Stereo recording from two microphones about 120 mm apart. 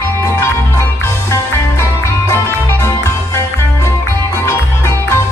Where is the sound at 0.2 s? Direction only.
25° left (ahead or behind).